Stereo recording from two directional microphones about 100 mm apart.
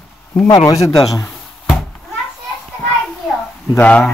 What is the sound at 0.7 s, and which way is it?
Speech, 35° left (ahead or behind).